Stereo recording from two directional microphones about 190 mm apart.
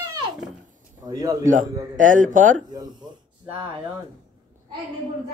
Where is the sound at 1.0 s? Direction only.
20° right (ahead or behind).